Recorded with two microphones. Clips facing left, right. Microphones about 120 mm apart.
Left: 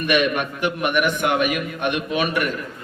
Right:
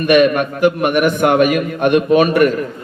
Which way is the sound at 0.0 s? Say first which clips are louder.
Right 8 dB; 45° right (ahead or behind).